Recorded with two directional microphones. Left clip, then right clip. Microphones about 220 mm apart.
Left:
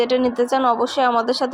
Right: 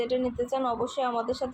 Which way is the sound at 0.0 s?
30° left (ahead or behind).